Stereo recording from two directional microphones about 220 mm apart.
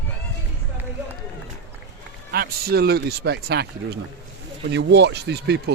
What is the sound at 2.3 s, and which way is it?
Speech, 45° right (ahead or behind).